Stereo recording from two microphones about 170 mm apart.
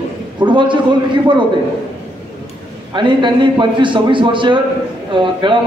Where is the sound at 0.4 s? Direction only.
30° right (ahead or behind).